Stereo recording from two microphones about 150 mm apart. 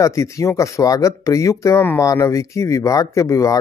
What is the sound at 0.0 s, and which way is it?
Speech, 20° left (ahead or behind).